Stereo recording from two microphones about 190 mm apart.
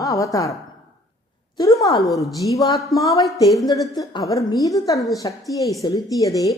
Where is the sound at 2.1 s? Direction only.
15° left (ahead or behind).